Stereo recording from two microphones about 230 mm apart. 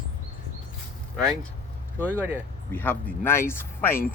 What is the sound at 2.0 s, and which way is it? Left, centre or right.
Speech, centre.